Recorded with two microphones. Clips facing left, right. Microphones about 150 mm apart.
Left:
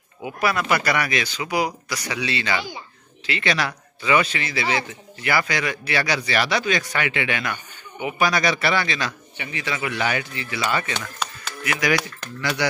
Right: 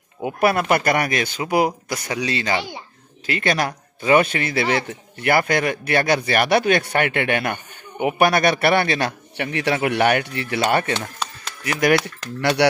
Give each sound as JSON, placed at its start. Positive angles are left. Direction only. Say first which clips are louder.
{"t": 0.2, "sound": "a man's voice", "louder": "right 5 dB", "side_deg": -55}
{"t": 11.1, "sound": "a sound", "louder": "even", "side_deg": -35}
{"t": 12.4, "sound": "a man's voice", "louder": "right 7 dB", "side_deg": -65}